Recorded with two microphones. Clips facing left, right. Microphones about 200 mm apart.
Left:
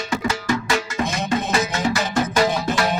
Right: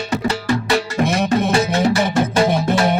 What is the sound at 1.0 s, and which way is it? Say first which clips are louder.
Music: right 6 dB; 60° right (ahead or behind).